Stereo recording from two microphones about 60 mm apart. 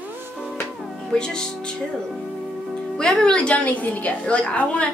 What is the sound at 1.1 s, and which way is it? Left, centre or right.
Speech, centre.